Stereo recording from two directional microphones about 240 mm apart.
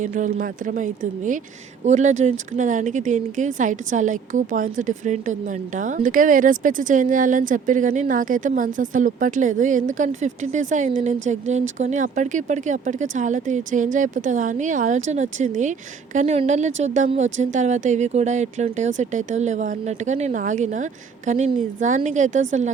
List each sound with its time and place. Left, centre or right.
0.0 s a woman's voice: right